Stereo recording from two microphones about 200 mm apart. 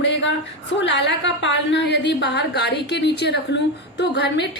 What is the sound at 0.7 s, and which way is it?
A woman's voice, 60° left (ahead or behind).